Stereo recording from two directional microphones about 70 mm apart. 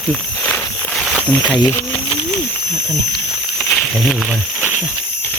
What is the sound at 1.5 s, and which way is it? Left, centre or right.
Speech, left.